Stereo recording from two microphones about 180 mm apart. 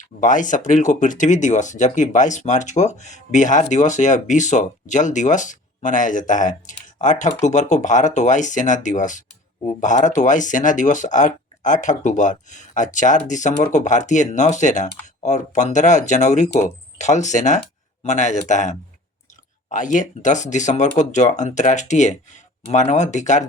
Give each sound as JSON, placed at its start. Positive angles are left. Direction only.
{"t": 0.2, "sound": "speech", "side_deg": 45}